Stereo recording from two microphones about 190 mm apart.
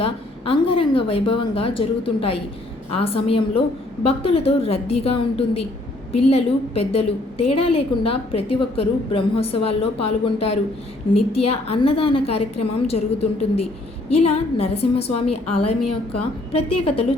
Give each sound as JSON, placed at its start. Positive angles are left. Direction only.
{"t": 0.0, "sound": "a woman's voice", "side_deg": 30}